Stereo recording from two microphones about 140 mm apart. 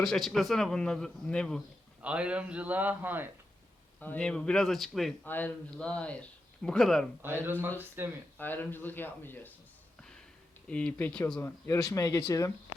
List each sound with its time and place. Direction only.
0.0 s a man's voice: centre (ahead or behind)
2.0 s a man's voice: 10° right (ahead or behind)
4.0 s a man's voice: 10° left (ahead or behind)
5.2 s a man's voice: 15° left (ahead or behind)
7.8 s a man's voice: 15° right (ahead or behind)
8.4 s speech: 15° left (ahead or behind)
10.7 s speech: 10° left (ahead or behind)